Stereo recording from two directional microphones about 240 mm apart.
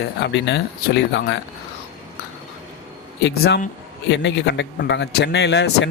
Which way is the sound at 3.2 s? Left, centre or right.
Left.